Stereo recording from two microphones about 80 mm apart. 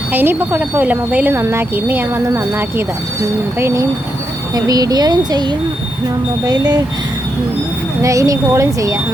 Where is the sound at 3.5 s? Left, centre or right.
Right.